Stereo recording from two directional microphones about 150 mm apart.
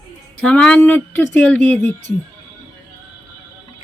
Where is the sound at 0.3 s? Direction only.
10° left (ahead or behind).